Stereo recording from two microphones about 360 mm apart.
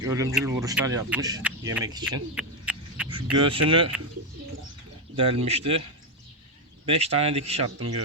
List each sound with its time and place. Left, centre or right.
0.0 s speech: centre
1.7 s a sound: centre
3.3 s speech: centre
5.1 s speech: centre
6.8 s speech: centre